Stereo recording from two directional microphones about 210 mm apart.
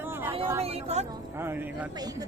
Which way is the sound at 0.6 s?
30° right (ahead or behind).